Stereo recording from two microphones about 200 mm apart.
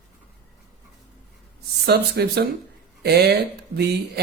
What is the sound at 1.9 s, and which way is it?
Speech, 55° right (ahead or behind).